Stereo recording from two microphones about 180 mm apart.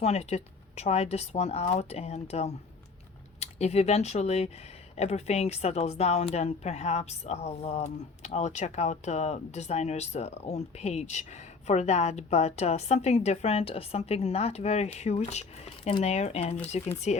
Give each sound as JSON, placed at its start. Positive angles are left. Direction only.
{"t": 0.0, "sound": "a woman's voice", "side_deg": 35}